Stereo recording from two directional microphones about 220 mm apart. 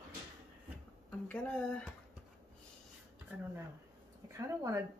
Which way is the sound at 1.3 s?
5° left (ahead or behind).